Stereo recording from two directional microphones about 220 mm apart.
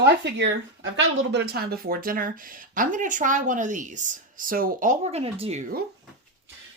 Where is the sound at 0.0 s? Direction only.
50° right (ahead or behind); by 5.8 s 35° right (ahead or behind).